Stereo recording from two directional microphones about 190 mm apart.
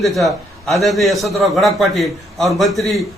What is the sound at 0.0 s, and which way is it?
A man's voice, centre (ahead or behind).